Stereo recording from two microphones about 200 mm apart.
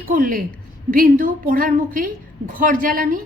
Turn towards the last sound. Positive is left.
turn(degrees=-45)  # may be behind; listen again after turning